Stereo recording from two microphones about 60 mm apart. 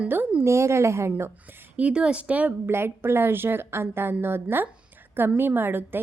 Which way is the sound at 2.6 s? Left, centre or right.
Right.